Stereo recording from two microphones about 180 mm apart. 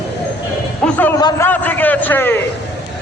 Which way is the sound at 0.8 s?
10° left (ahead or behind).